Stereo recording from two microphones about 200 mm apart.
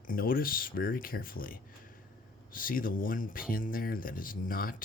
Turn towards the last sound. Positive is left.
turn(degrees=45)  # may be behind; listen again after turning